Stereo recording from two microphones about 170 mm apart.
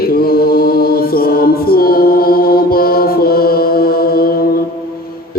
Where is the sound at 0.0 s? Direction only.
60° left (ahead or behind).